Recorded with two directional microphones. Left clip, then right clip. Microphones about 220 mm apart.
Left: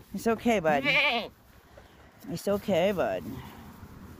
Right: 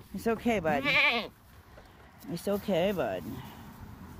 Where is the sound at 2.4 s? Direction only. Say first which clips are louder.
Left 3 dB; 15° left (ahead or behind).